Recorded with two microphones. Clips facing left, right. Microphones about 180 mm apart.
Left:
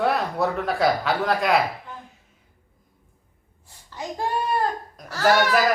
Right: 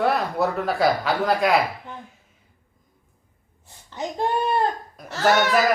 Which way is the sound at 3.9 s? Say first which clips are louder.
Right 3 dB; 20° right (ahead or behind).